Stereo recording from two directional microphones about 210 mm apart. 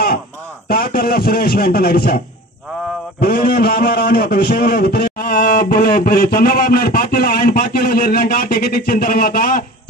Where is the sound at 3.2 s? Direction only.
50° left (ahead or behind).